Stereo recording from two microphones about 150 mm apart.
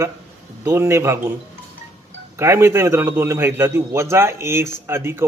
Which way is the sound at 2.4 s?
20° right (ahead or behind).